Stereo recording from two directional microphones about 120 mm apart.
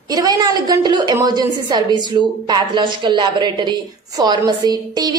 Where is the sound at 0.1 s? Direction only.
30° right (ahead or behind).